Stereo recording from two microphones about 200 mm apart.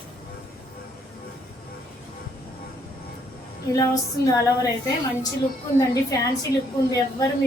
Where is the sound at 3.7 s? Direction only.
15° left (ahead or behind).